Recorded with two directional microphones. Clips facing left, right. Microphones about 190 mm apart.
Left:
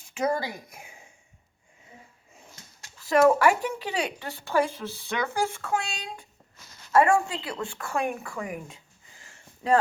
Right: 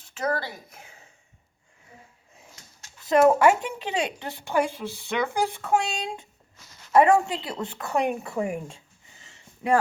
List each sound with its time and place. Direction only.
0.0 s a woman's voice: 10° left (ahead or behind)
3.0 s a woman's voice: 20° right (ahead or behind)